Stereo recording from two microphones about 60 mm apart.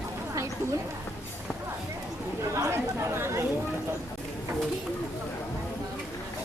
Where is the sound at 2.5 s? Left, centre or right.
Right.